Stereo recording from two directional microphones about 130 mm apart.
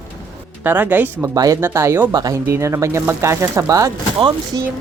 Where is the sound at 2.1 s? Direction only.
30° right (ahead or behind).